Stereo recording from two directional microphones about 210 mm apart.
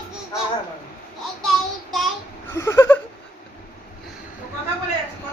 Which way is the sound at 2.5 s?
15° left (ahead or behind).